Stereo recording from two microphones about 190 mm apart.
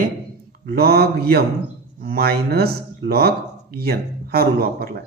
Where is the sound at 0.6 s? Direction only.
55° right (ahead or behind).